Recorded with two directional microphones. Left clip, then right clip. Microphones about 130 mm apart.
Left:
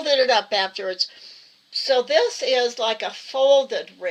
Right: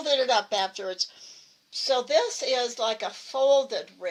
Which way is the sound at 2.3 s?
15° left (ahead or behind).